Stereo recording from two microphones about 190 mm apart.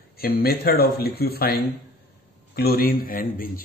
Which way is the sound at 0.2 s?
55° left (ahead or behind).